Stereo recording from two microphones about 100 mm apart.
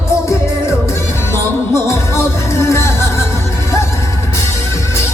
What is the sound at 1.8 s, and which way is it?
Music, 30° left (ahead or behind).